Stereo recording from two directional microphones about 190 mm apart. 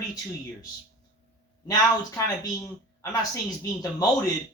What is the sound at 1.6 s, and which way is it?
Speech, 20° left (ahead or behind).